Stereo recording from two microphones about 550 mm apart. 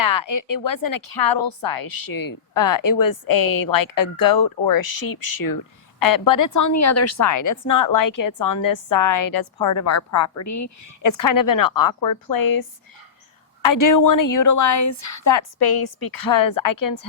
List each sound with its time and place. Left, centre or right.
0.0 s a woman's voice: left